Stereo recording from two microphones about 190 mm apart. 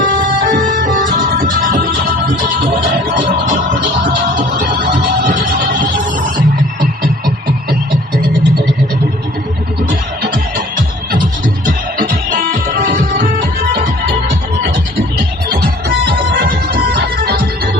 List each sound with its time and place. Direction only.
0.0 s music: 45° right (ahead or behind)
4.4 s music: 45° right (ahead or behind)
11.6 s music: 45° right (ahead or behind)
15.5 s music: 55° right (ahead or behind)